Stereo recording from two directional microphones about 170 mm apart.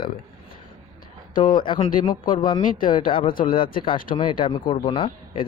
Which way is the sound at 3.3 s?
55° left (ahead or behind).